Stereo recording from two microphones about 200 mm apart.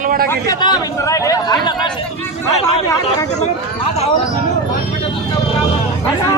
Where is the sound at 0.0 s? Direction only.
45° right (ahead or behind).